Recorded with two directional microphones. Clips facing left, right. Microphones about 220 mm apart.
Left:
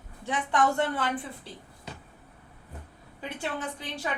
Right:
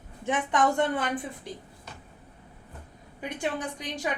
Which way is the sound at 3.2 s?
15° right (ahead or behind).